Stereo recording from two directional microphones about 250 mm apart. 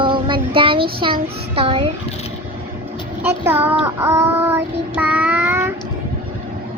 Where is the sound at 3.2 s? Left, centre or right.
Centre.